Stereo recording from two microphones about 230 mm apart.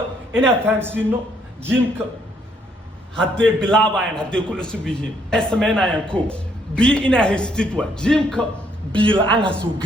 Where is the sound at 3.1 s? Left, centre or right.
Centre.